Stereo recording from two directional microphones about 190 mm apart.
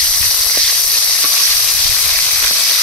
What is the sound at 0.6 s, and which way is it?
Sizzle, 5° left (ahead or behind).